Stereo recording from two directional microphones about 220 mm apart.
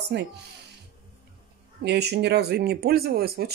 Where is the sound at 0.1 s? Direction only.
50° right (ahead or behind).